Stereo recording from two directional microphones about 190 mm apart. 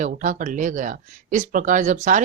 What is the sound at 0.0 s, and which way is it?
Speech, 40° right (ahead or behind).